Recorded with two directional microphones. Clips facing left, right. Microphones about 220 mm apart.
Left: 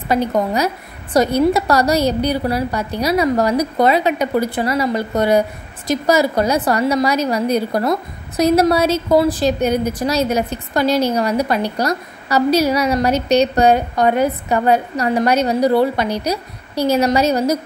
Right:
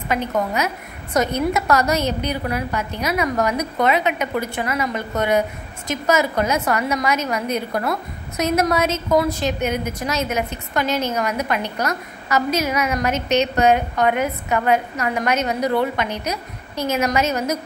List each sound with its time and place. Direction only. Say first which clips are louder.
0.1 s a woman's voice: left 5 dB; 35° left (ahead or behind)